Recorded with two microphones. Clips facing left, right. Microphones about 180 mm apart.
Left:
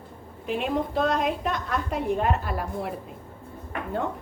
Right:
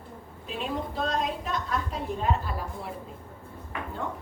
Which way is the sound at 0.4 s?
65° left (ahead or behind).